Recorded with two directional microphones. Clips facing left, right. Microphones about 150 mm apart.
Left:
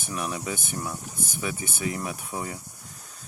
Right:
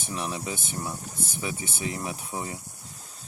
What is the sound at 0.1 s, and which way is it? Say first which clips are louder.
Speech: left 1 dB; 25° right (ahead or behind).